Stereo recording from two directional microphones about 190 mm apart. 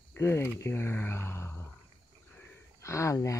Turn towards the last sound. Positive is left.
turn(degrees=15)  # may be behind; listen again after turning